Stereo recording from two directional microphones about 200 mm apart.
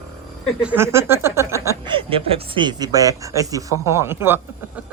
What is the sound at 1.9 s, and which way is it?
Speech, 25° right (ahead or behind).